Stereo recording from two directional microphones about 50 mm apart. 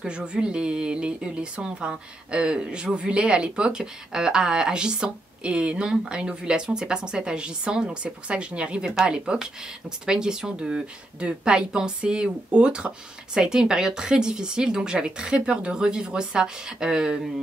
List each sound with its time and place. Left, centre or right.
0.0 s a woman's voice: centre